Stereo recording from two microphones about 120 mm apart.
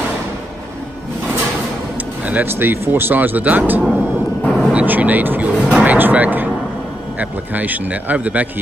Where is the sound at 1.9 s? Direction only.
15° right (ahead or behind).